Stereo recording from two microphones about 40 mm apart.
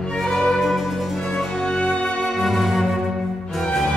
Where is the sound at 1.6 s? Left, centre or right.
Centre.